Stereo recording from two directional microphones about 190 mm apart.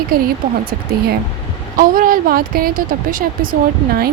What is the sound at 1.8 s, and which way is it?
Speech, 50° right (ahead or behind).